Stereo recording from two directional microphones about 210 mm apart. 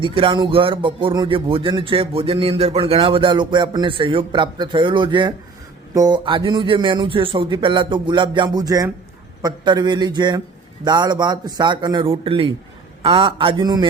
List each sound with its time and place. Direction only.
0.0 s speech: 25° right (ahead or behind)